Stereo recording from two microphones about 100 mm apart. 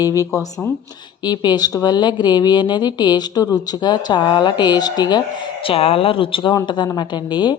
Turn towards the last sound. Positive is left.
turn(degrees=45)  # may be behind; listen again after turning